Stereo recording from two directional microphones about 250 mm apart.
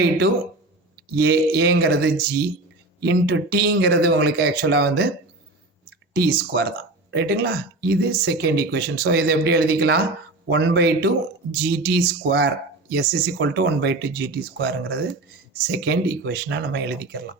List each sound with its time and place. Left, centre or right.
1.1 s speech: right
6.1 s speech: right